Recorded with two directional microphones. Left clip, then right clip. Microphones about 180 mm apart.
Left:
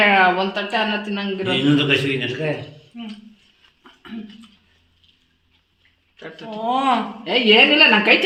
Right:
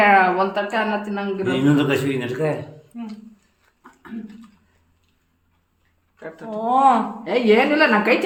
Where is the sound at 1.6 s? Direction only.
35° right (ahead or behind).